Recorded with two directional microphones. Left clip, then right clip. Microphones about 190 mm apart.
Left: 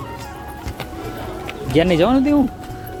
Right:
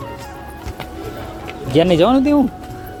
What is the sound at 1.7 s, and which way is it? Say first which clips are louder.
Speech: right 2 dB; 15° right (ahead or behind).